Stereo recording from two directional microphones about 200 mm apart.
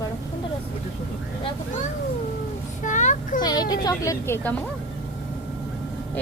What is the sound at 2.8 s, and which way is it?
Vehicle, 40° left (ahead or behind).